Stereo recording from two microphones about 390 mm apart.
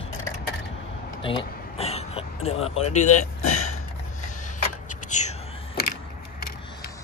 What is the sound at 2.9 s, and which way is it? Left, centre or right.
Speech, centre.